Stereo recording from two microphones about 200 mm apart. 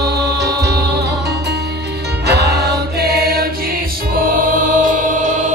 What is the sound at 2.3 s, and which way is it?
Music, 55° right (ahead or behind).